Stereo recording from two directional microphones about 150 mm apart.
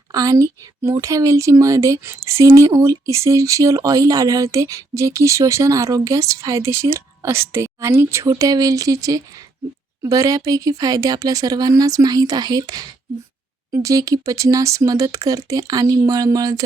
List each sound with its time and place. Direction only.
0.1 s speech: 25° right (ahead or behind)